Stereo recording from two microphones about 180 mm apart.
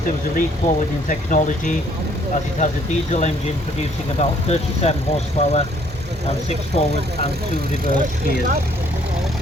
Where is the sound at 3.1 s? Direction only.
40° left (ahead or behind).